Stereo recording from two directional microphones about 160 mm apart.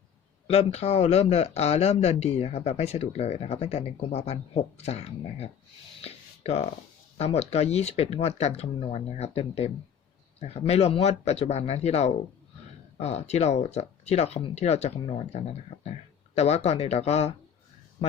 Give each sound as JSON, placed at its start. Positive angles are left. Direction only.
{"t": 0.5, "sound": "speech", "side_deg": 40}
{"t": 6.0, "sound": "a sound", "side_deg": 40}
{"t": 7.2, "sound": "speech", "side_deg": 40}